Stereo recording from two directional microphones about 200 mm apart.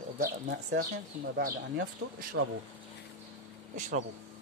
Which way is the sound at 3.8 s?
40° right (ahead or behind).